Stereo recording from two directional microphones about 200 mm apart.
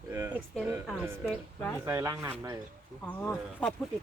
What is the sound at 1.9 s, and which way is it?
Speech, 15° right (ahead or behind).